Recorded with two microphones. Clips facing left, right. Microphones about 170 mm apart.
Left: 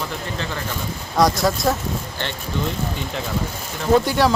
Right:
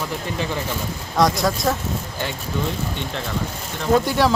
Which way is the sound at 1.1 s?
Centre (ahead or behind).